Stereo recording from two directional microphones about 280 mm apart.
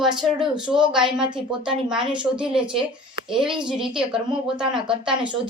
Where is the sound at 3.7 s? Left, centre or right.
Centre.